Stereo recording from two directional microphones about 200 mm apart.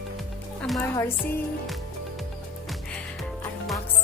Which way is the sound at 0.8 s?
15° left (ahead or behind).